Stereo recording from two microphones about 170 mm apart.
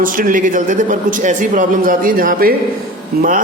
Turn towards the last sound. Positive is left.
turn(degrees=-55)  # may be behind; listen again after turning